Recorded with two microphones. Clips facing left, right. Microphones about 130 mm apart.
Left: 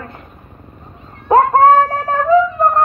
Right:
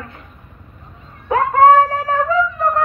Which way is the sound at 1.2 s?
40° left (ahead or behind).